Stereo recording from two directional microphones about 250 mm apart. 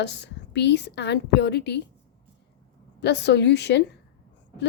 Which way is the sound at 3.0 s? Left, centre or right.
Left.